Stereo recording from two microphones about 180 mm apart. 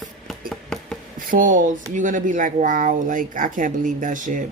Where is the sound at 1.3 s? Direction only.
45° right (ahead or behind).